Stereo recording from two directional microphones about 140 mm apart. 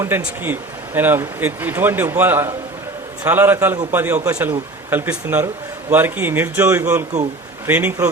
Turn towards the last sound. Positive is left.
turn(degrees=-10)  # may be behind; listen again after turning